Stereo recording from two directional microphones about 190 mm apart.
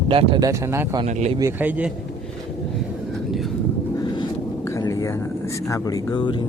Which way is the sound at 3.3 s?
Centre (ahead or behind).